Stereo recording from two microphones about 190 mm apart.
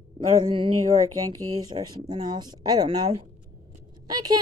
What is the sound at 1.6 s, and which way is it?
A woman's voice, 20° right (ahead or behind).